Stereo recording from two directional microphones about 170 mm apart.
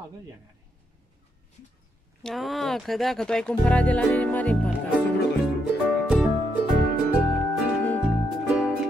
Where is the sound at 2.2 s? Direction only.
Centre (ahead or behind).